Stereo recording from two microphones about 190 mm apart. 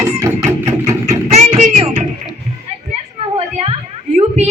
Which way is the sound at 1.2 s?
35° right (ahead or behind).